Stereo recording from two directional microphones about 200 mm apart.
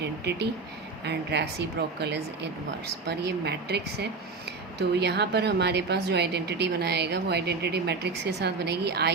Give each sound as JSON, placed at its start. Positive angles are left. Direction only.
{"t": 0.0, "sound": "speech", "side_deg": -55}